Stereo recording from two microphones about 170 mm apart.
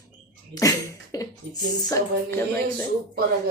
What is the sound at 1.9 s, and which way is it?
Speech, 15° left (ahead or behind).